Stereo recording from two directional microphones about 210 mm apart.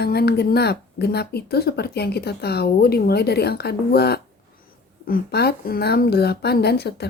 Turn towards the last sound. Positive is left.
turn(degrees=50)  # may be behind; listen again after turning